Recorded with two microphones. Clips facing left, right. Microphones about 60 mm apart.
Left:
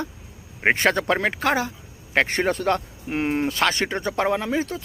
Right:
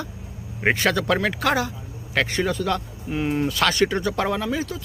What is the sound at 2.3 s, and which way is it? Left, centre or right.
Speech, left.